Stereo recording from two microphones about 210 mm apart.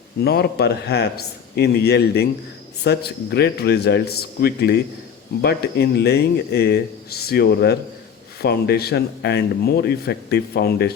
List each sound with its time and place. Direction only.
0.2 s speech: 50° left (ahead or behind)